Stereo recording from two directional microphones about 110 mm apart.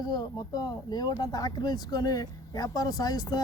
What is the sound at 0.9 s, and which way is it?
Speech, 35° left (ahead or behind).